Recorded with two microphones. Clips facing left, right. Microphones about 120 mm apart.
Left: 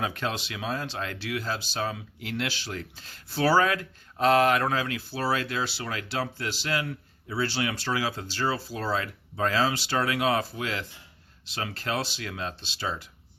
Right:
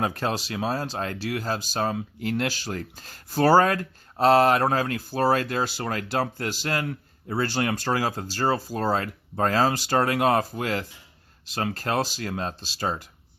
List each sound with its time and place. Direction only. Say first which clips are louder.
0.0 s speech: right 4 dB; 40° right (ahead or behind)